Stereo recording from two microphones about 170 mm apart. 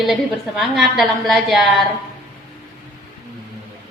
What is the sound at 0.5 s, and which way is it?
A woman's voice, centre (ahead or behind).